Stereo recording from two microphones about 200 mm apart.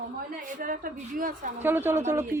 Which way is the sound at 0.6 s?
45° right (ahead or behind).